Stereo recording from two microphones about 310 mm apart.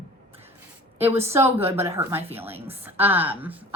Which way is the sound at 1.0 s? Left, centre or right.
Centre.